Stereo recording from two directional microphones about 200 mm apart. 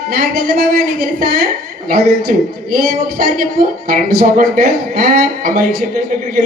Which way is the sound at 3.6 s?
45° right (ahead or behind).